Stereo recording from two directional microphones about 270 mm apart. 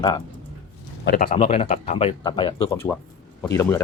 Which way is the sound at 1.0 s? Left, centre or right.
Left.